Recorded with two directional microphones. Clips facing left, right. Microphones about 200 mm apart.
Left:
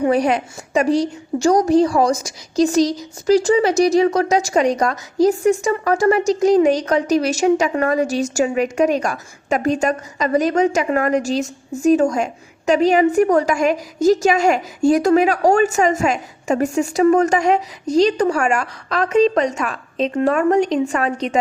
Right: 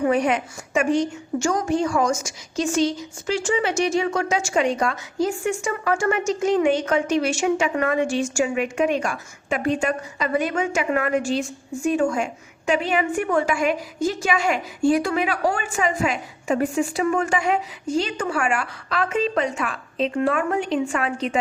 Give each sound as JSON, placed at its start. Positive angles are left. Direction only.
{"t": 0.0, "sound": "a woman's voice", "side_deg": 35}